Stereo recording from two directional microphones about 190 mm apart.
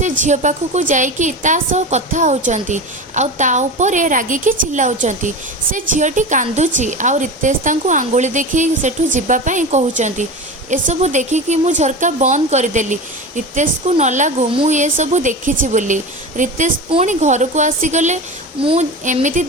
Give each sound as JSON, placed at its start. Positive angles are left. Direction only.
{"t": 0.0, "sound": "a woman's voice", "side_deg": -40}
{"t": 18.6, "sound": "speech", "side_deg": -30}
{"t": 19.0, "sound": "a woman's voice", "side_deg": -40}